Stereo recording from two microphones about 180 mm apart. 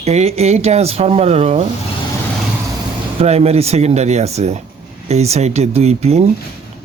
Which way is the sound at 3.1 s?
35° right (ahead or behind).